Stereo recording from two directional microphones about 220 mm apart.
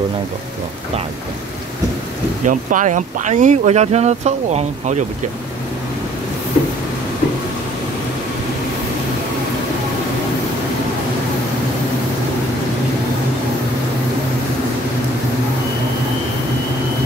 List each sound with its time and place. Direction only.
2.4 s speech: 35° right (ahead or behind)